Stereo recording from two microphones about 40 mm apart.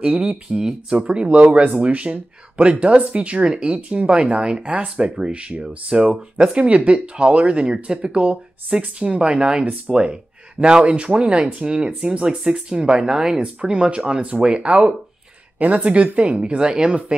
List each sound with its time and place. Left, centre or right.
0.0 s speech: right
0.6 s speech: centre
0.9 s speech: right